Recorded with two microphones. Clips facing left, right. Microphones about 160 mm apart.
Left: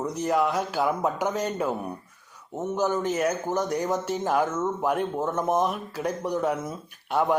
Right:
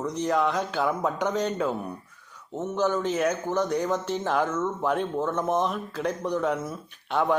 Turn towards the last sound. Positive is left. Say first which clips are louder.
# left 1 dB
turn(degrees=10)  # may be behind; listen again after turning